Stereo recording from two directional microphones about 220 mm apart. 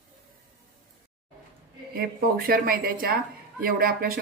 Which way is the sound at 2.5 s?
40° right (ahead or behind).